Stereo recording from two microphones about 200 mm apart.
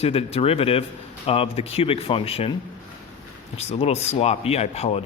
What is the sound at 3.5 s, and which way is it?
Speech, 30° left (ahead or behind).